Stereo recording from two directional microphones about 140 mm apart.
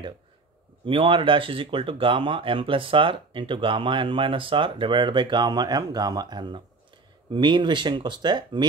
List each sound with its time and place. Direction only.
0.8 s speech: 40° right (ahead or behind)